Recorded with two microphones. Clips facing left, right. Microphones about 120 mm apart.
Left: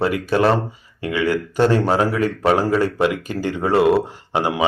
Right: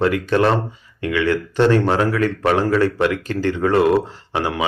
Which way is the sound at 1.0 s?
30° left (ahead or behind).